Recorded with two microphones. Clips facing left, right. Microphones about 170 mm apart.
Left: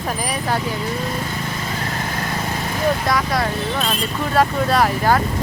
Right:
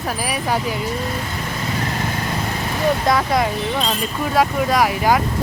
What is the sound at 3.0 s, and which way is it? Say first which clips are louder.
Speech: right 3 dB; 25° right (ahead or behind).